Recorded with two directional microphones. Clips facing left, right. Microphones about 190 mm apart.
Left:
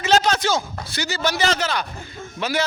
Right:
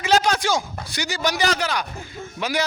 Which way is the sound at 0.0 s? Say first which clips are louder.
Left 1 dB; 10° right (ahead or behind).